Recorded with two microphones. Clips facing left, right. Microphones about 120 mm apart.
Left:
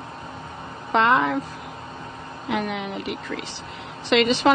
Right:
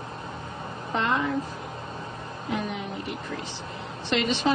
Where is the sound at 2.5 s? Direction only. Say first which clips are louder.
Left 4 dB; 90° left.